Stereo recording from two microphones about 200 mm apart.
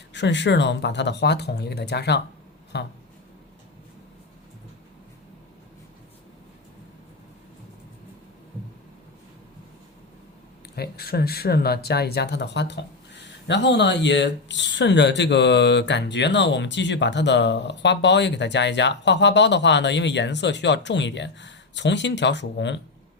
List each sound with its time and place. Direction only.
0.1 s speech: 60° left (ahead or behind)
10.8 s speech: 50° left (ahead or behind)